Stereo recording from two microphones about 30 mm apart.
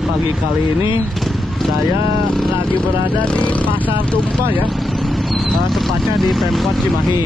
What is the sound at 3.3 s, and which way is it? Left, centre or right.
Speech, left.